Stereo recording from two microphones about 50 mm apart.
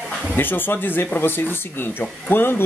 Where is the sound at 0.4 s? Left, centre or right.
Left.